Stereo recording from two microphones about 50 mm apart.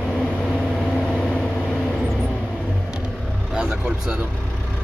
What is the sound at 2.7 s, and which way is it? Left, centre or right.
Vehicle, centre.